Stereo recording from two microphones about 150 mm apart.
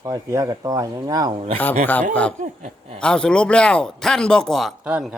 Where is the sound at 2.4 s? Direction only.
55° right (ahead or behind).